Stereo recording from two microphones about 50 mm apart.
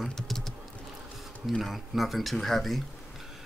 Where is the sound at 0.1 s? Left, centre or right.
Centre.